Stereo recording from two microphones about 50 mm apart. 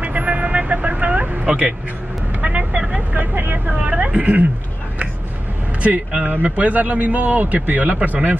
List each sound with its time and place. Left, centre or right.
0.0 s vehicle: right
2.4 s vehicle: right
3.2 s vehicle: right
3.6 s speech: right
6.2 s a man's voice: right